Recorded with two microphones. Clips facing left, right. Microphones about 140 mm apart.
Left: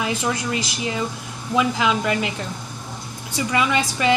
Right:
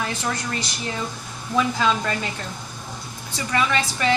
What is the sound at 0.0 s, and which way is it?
A woman's voice, 10° left (ahead or behind).